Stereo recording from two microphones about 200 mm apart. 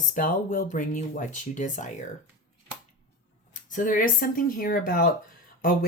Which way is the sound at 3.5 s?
40° left (ahead or behind).